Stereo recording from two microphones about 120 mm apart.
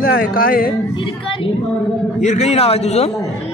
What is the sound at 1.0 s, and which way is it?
Speech, 50° left (ahead or behind).